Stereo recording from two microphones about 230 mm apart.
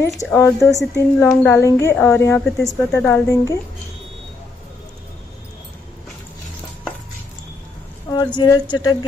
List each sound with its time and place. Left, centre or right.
0.0 s a woman's voice: centre
2.9 s a woman's voice: centre
8.4 s speech: centre